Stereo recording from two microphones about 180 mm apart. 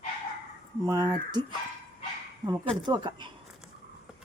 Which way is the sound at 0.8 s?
20° right (ahead or behind).